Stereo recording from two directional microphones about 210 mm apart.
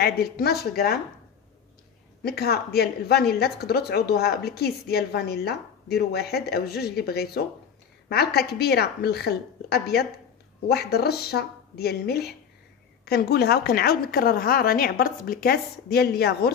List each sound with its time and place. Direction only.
0.0 s a woman's voice: 50° left (ahead or behind)
2.2 s a woman's voice: 50° left (ahead or behind)